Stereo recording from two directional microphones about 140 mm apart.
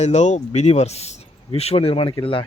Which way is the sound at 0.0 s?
55° left (ahead or behind).